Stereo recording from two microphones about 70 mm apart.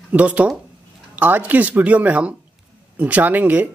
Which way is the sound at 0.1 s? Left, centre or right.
Right.